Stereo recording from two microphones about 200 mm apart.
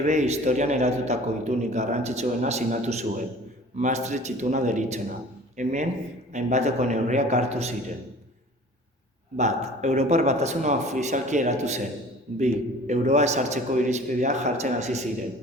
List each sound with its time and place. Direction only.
0.0 s a man's voice: 35° right (ahead or behind)
9.4 s a man's voice: 35° right (ahead or behind)